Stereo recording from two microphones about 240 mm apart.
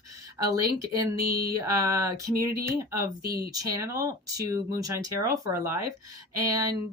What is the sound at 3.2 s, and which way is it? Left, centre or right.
Speech, right.